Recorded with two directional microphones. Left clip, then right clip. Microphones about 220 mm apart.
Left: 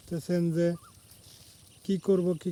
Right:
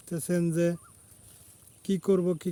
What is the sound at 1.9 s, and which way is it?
Speech, 10° right (ahead or behind).